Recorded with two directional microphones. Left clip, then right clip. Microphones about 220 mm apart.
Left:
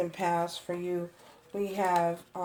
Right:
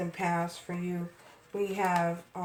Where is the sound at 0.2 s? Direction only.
40° left (ahead or behind).